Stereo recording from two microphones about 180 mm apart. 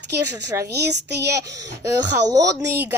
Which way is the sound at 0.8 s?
70° right (ahead or behind).